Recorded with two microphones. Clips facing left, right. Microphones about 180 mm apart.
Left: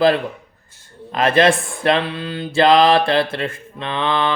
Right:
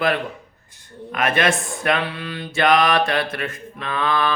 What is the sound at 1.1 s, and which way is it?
Mantra, 30° left (ahead or behind).